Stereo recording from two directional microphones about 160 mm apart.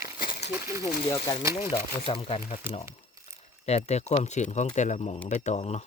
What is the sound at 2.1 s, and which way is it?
Speech, 35° left (ahead or behind).